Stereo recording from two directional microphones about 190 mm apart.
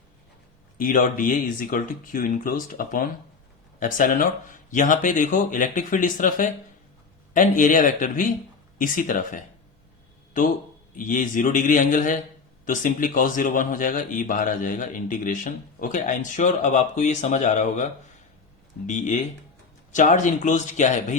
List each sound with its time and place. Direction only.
0.8 s speech: 45° left (ahead or behind)
10.9 s speech: 45° left (ahead or behind)